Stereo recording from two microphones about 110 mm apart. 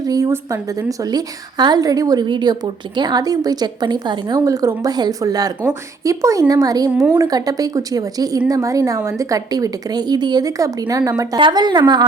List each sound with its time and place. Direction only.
0.0 s a woman's voice: 35° right (ahead or behind)
11.3 s a woman's voice: 45° right (ahead or behind)